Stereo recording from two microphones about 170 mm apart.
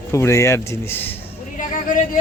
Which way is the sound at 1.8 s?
50° left (ahead or behind).